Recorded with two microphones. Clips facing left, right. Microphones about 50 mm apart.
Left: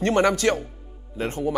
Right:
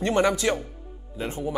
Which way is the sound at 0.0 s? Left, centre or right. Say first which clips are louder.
Left 2 dB; left.